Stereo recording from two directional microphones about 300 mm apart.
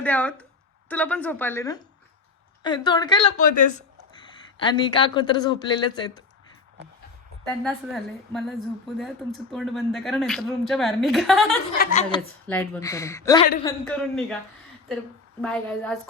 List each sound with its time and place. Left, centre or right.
0.0 s a woman's voice: centre; by 3.8 s left
4.2 s speech: centre
7.6 s speech: centre
11.8 s a woman's voice: left
12.5 s speech: centre
15.4 s speech: centre